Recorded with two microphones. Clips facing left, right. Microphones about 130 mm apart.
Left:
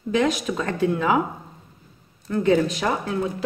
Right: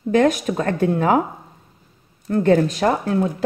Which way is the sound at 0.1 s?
50° right (ahead or behind).